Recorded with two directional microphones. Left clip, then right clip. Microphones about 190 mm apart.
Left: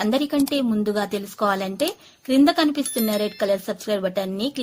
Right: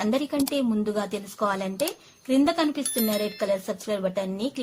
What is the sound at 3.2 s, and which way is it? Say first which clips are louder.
A woman's voice: left 4 dB; 25° left (ahead or behind).